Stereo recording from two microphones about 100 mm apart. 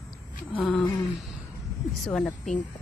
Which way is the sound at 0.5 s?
15° left (ahead or behind).